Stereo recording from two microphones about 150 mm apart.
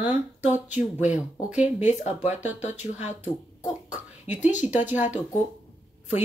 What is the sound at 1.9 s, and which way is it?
Speech, 50° left (ahead or behind).